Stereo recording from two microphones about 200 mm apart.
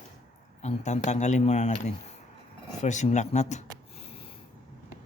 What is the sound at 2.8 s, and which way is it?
Speech, 35° left (ahead or behind).